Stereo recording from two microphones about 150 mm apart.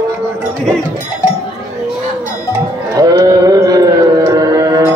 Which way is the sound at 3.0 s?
25° right (ahead or behind).